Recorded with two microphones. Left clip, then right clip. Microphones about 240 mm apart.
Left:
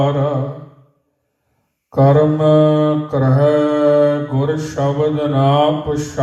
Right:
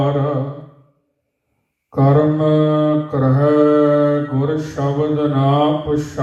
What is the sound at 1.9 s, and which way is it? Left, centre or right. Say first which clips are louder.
Mantra: left 2 dB; left.